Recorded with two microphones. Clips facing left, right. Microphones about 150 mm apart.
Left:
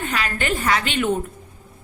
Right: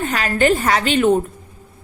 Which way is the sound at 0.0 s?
40° right (ahead or behind).